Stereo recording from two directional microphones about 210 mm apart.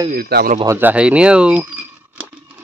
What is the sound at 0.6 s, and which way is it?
Speech, 10° right (ahead or behind).